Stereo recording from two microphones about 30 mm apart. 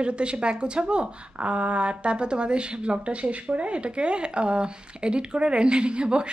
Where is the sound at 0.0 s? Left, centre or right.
Right.